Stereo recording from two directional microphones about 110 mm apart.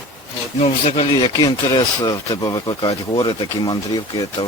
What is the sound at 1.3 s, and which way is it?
Speech, 40° left (ahead or behind).